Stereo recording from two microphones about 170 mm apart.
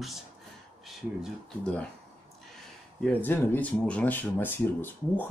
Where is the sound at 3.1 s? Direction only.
10° left (ahead or behind).